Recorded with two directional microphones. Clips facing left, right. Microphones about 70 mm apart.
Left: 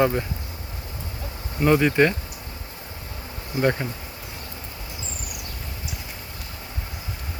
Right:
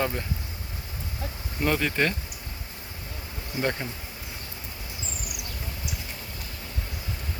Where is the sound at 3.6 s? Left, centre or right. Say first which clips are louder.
Left 6 dB; centre.